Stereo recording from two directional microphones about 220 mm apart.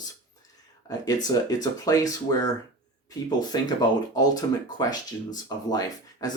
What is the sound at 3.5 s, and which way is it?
Speech, 20° left (ahead or behind).